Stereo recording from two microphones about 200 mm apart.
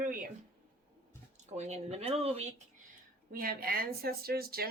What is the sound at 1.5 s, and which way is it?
Speech, 35° right (ahead or behind).